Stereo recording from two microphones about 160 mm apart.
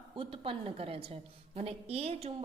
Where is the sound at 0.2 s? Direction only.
35° right (ahead or behind).